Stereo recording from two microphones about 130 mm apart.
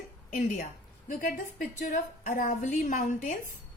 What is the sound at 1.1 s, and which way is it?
A woman's voice, 90° left.